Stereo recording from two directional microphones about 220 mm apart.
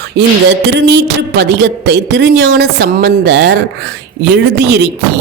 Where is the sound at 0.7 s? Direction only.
50° right (ahead or behind).